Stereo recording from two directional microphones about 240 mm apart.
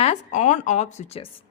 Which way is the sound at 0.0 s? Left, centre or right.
Left.